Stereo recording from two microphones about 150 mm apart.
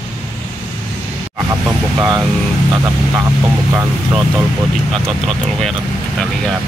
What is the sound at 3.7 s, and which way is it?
Speech, 15° right (ahead or behind).